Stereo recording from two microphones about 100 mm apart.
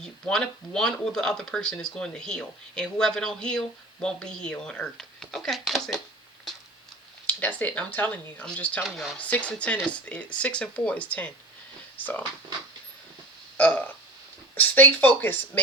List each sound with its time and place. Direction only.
0.0 s speech: 5° left (ahead or behind)
7.3 s speech: 15° left (ahead or behind)
8.8 s speech: centre (ahead or behind)
9.1 s speech: 15° left (ahead or behind)
13.6 s speech: 15° left (ahead or behind)